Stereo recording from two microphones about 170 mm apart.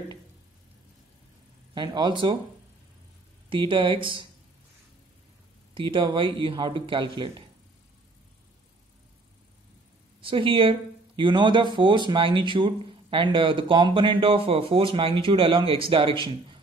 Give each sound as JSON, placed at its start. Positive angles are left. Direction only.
{"t": 1.7, "sound": "a man's voice", "side_deg": -25}
{"t": 3.4, "sound": "a man's voice", "side_deg": -30}
{"t": 5.8, "sound": "a man's voice", "side_deg": -30}
{"t": 10.2, "sound": "speech", "side_deg": -30}